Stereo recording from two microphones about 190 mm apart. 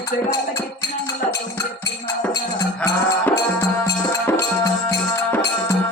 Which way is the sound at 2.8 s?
15° left (ahead or behind).